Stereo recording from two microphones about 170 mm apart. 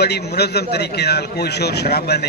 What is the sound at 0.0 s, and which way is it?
A man's voice, 75° left (ahead or behind).